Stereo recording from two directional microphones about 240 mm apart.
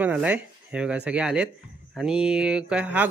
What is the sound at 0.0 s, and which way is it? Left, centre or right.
Speech, centre.